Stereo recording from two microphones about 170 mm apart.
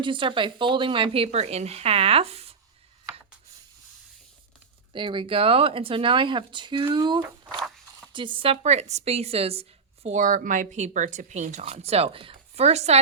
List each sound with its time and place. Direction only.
0.0 s a woman's voice: 30° right (ahead or behind)
4.9 s a woman's voice: 30° right (ahead or behind)